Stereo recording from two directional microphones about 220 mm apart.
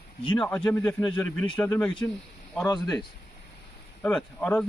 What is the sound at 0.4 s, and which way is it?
Speech, 10° left (ahead or behind).